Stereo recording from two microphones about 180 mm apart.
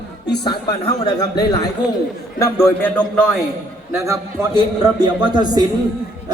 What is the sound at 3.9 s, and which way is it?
A man's voice, 15° right (ahead or behind).